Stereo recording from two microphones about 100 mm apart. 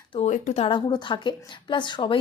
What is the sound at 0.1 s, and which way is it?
Speech, 90° left.